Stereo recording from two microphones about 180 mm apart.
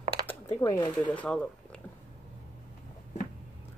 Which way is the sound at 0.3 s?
15° left (ahead or behind).